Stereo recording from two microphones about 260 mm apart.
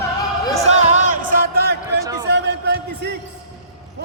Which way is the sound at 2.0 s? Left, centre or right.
Centre.